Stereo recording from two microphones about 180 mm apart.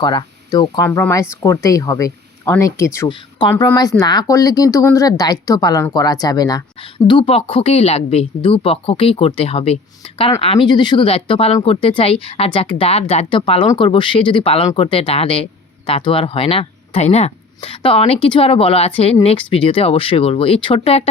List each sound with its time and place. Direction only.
0.0 s speech: 25° left (ahead or behind)
0.9 s speech: 10° left (ahead or behind)
3.1 s speech: 25° left (ahead or behind)